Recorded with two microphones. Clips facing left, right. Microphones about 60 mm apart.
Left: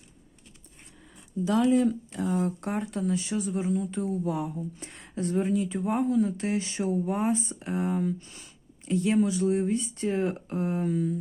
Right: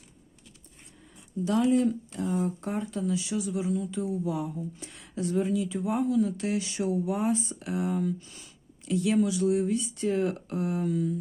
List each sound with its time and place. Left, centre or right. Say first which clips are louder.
2.3 s speech: left 1 dB; left
4.9 s speech: left 1 dB; left